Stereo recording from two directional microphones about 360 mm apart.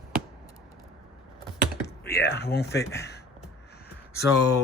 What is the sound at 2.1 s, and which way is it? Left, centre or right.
Speech, left.